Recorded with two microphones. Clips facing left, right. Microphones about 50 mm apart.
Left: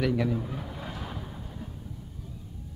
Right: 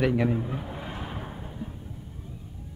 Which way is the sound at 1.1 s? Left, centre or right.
Right.